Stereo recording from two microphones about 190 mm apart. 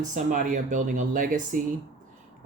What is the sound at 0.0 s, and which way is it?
Speech, 45° right (ahead or behind).